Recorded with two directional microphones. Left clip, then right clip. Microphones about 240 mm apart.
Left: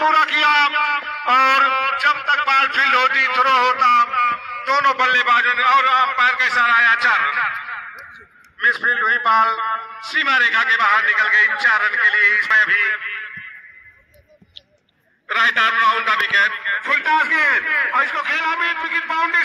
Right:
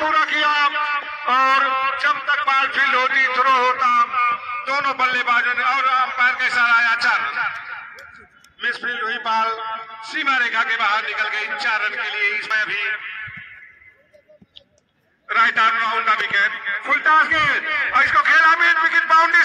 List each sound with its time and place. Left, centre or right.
0.0 s music: left; by 7.5 s centre
8.5 s a man's voice: centre
15.2 s a man's voice: left
16.7 s a sound: centre
17.3 s a man's voice: centre